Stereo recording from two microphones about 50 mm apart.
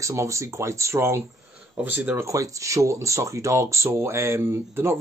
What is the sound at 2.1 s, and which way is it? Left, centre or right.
Speech, right.